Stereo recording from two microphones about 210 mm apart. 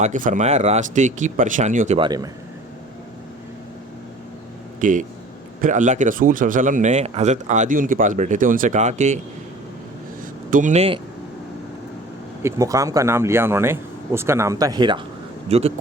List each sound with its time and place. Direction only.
0.0 s speech: 35° right (ahead or behind)
2.0 s speech: 20° right (ahead or behind)
4.8 s speech: 40° right (ahead or behind)
10.5 s speech: 35° right (ahead or behind)
12.4 s speech: 15° right (ahead or behind); by 15.7 s 30° right (ahead or behind)